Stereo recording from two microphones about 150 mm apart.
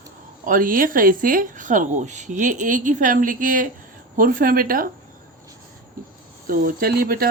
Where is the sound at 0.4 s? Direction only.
70° right (ahead or behind).